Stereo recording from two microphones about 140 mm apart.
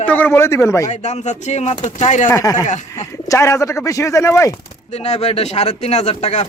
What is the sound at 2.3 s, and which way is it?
Speech, 25° left (ahead or behind).